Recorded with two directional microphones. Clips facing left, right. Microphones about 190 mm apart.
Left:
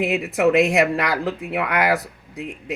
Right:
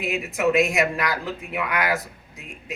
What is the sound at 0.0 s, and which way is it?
Speech, 65° left (ahead or behind).